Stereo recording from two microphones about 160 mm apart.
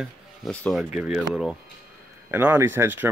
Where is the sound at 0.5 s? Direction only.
Centre (ahead or behind).